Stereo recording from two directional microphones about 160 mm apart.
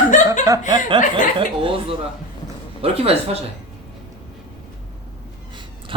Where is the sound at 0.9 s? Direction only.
30° right (ahead or behind).